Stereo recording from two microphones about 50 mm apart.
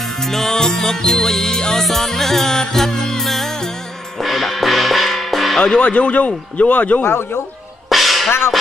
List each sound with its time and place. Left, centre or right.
0.2 s music: centre
5.8 s speech: left
7.1 s speech: left
7.9 s music: centre